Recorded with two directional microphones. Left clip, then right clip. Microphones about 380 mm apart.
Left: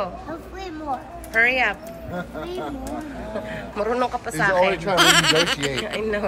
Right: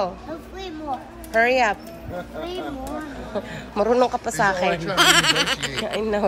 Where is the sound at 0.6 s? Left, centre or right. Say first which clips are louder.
Left 1 dB; centre.